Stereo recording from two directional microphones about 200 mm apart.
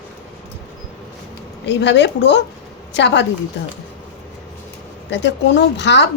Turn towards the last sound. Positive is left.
turn(degrees=60)  # may be behind; listen again after turning